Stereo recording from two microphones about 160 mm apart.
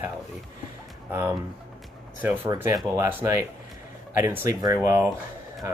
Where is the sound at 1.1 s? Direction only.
10° right (ahead or behind).